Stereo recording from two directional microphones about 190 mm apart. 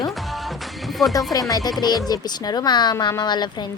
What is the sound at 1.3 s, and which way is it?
A woman's voice, 20° left (ahead or behind).